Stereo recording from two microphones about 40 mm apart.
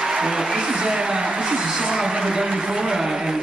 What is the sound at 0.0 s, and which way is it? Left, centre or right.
A woman's voice, centre.